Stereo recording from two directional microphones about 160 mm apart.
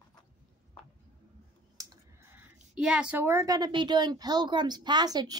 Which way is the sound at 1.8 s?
15° right (ahead or behind).